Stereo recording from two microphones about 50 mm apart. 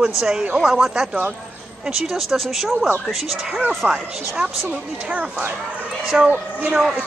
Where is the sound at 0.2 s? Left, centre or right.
Centre.